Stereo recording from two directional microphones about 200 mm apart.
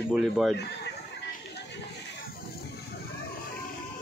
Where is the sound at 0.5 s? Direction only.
55° left (ahead or behind).